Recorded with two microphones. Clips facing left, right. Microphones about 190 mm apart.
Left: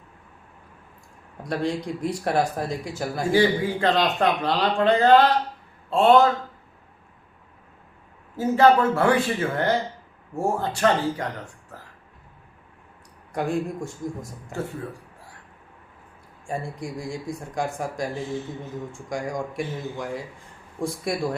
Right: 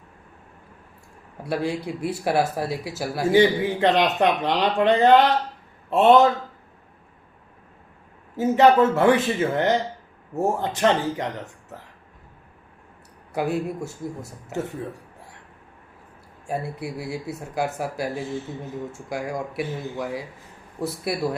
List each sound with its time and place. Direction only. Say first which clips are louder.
1.5 s speech: even; 5° right (ahead or behind)
3.3 s speech: right 2 dB; 20° right (ahead or behind)
8.4 s speech: right 1 dB; 20° right (ahead or behind)
13.3 s speech: right 1 dB; 5° right (ahead or behind)
16.5 s speech: right 2 dB; 5° right (ahead or behind)